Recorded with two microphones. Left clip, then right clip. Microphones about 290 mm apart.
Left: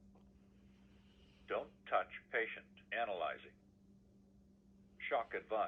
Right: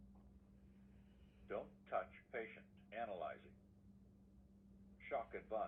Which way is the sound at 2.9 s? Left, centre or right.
Left.